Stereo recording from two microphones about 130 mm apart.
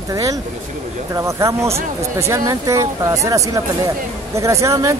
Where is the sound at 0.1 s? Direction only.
25° right (ahead or behind).